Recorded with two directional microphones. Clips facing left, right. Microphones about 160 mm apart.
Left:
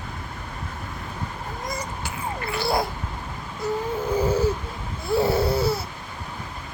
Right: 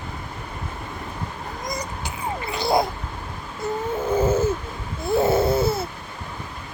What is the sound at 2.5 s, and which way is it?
Dog, 20° right (ahead or behind).